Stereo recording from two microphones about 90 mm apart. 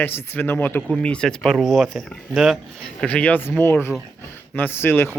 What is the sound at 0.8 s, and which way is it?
Speech, 10° left (ahead or behind).